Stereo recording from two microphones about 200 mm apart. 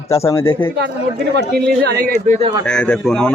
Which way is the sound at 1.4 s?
55° right (ahead or behind).